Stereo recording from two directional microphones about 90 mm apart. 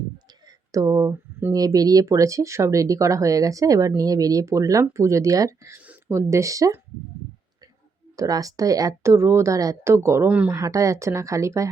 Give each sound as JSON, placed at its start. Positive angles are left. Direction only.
{"t": 0.4, "sound": "a sound", "side_deg": -45}
{"t": 1.1, "sound": "a sound", "side_deg": -25}
{"t": 1.5, "sound": "speech", "side_deg": -45}
{"t": 8.1, "sound": "speech", "side_deg": -40}
{"t": 9.0, "sound": "speech", "side_deg": -30}
{"t": 10.2, "sound": "speech", "side_deg": -15}
{"t": 10.5, "sound": "speech", "side_deg": -35}